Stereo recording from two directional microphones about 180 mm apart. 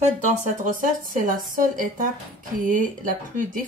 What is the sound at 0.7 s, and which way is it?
A woman's voice, 50° right (ahead or behind).